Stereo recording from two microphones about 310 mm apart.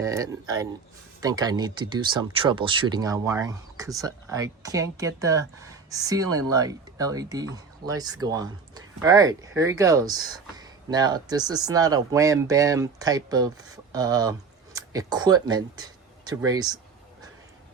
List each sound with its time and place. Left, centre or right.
0.0 s speech: centre